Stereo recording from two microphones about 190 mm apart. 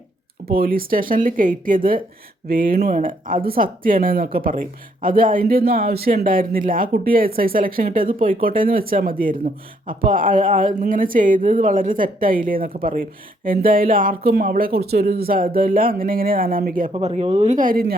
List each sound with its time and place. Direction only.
0.5 s speech: 50° right (ahead or behind)
16.9 s speech: 35° right (ahead or behind); by 17.9 s 50° right (ahead or behind)